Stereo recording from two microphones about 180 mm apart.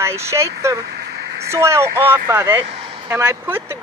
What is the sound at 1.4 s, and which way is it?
Speech, 15° right (ahead or behind).